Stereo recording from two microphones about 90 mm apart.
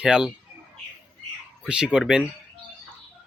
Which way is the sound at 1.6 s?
10° right (ahead or behind).